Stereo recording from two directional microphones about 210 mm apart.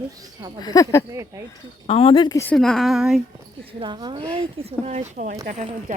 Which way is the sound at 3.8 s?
20° right (ahead or behind).